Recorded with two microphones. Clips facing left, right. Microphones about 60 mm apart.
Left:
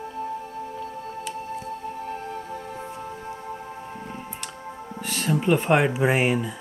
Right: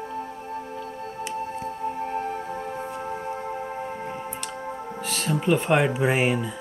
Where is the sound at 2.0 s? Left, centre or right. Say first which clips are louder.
Right 4 dB; right.